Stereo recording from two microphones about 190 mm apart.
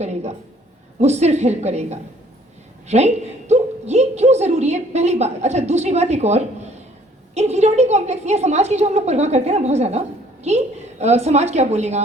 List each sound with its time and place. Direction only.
0.0 s a woman's voice: 35° right (ahead or behind)